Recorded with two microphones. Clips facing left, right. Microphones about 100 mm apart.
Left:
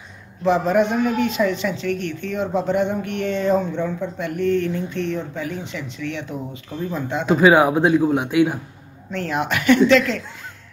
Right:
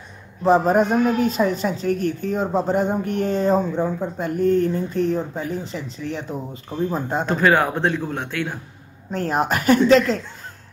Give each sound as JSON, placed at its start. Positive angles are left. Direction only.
{"t": 0.4, "sound": "a woman's voice", "side_deg": -40}
{"t": 7.2, "sound": "speech", "side_deg": 5}
{"t": 9.1, "sound": "a woman's voice", "side_deg": -40}